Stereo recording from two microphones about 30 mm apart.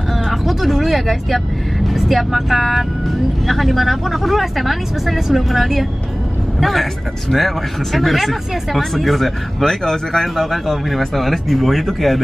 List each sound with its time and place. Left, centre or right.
0.3 s speech: centre
9.7 s speech: centre